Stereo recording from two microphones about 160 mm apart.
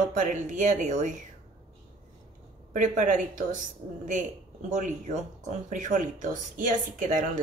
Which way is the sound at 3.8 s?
35° right (ahead or behind).